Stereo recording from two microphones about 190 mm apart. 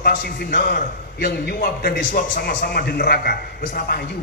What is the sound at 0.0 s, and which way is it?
A man's voice, 50° left (ahead or behind).